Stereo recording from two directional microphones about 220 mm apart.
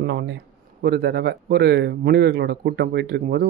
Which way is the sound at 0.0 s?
55° right (ahead or behind).